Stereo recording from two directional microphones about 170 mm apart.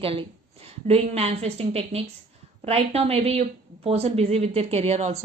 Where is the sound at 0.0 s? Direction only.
35° right (ahead or behind).